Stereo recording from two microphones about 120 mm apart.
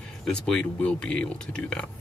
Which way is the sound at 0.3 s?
10° left (ahead or behind).